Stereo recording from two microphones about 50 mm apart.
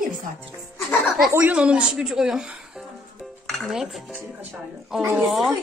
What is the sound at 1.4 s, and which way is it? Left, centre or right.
A man's voice, right.